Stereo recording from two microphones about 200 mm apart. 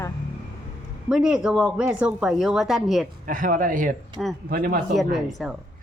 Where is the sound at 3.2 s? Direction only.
45° right (ahead or behind).